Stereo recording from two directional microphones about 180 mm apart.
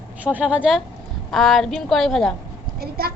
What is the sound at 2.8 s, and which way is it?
Speech, 60° right (ahead or behind).